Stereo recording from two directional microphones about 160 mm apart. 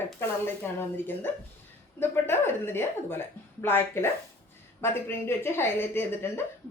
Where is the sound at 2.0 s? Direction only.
15° left (ahead or behind).